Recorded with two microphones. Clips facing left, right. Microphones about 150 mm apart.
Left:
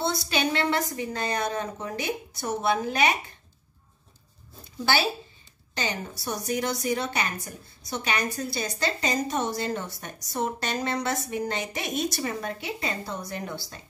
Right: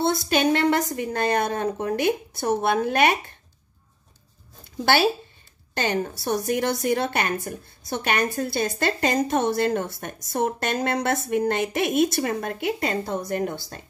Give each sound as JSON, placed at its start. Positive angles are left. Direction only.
{"t": 0.0, "sound": "a woman's voice", "side_deg": -50}
{"t": 5.8, "sound": "a woman's voice", "side_deg": -55}